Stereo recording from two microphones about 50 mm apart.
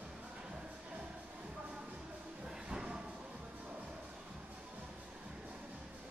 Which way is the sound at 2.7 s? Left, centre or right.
Centre.